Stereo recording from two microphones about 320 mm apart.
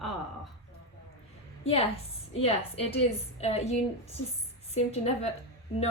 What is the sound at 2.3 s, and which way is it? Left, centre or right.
A woman's voice, centre.